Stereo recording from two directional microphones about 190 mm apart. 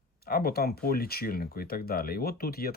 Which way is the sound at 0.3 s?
50° left (ahead or behind).